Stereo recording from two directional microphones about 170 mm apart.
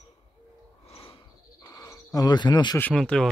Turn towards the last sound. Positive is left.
turn(degrees=5)  # may be behind; listen again after turning